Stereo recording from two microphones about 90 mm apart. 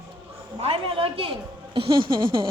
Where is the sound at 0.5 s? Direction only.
90° right.